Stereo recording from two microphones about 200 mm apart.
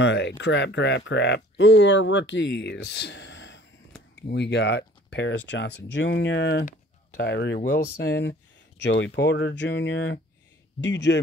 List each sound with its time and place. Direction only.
0.0 s speech: 60° left (ahead or behind)